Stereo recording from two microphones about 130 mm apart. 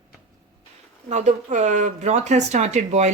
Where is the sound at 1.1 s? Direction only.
65° right (ahead or behind).